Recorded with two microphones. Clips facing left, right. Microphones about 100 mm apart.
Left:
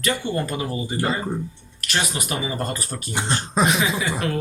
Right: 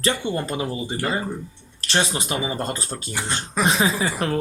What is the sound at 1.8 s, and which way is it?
Speech, 30° right (ahead or behind).